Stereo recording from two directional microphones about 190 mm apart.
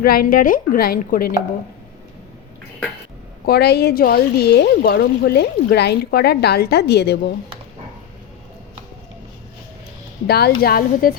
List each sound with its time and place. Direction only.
0.0 s a woman's voice: 50° left (ahead or behind)
3.4 s a woman's voice: 55° left (ahead or behind)
10.2 s a woman's voice: 55° left (ahead or behind)